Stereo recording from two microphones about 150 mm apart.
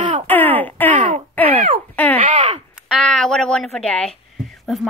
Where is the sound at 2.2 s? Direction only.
40° right (ahead or behind).